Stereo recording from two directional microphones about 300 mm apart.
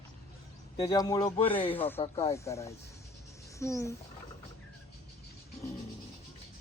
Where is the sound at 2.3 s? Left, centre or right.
Centre.